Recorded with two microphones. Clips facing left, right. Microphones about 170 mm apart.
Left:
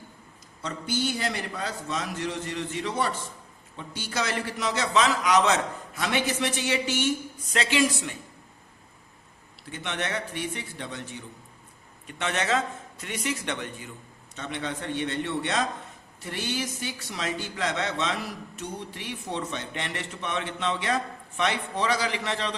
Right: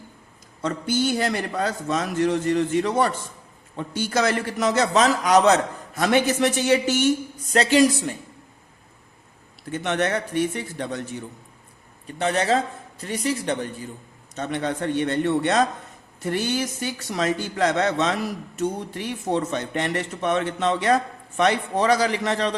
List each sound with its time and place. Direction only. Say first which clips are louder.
0.6 s a man's voice: right 6 dB; 50° right (ahead or behind)
9.7 s a man's voice: right 8 dB; 45° right (ahead or behind)